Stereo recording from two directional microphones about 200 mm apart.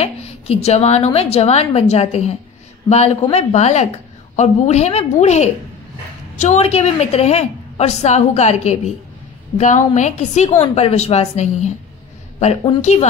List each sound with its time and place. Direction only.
0.0 s a woman's voice: 30° left (ahead or behind)